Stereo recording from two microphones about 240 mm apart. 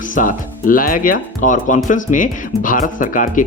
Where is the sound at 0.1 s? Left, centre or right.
Left.